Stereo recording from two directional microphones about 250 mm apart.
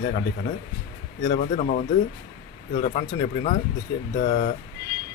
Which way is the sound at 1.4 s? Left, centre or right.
Left.